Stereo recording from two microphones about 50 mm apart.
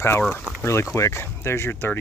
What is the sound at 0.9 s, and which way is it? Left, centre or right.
Speech, left.